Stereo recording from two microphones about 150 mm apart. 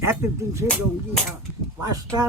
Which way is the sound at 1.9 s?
25° right (ahead or behind).